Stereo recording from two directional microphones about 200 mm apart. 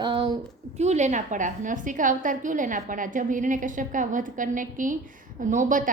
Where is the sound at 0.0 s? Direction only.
25° right (ahead or behind).